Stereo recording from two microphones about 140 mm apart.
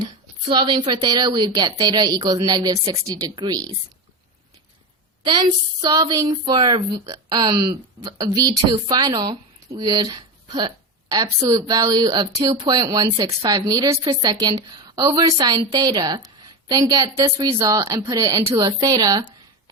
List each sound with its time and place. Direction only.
0.0 s a woman's voice: 35° right (ahead or behind)
5.2 s speech: 30° right (ahead or behind)